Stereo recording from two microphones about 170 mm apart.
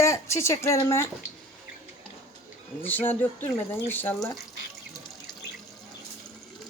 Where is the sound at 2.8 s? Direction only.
10° left (ahead or behind).